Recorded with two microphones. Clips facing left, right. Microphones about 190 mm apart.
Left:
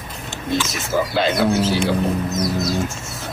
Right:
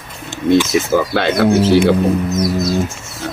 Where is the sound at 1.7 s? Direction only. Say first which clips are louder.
Right 9 dB; 65° right (ahead or behind).